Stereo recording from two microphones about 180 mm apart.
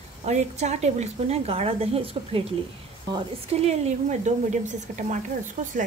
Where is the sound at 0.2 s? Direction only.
40° right (ahead or behind).